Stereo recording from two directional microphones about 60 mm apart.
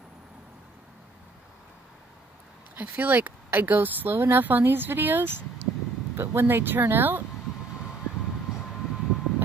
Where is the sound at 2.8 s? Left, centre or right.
Right.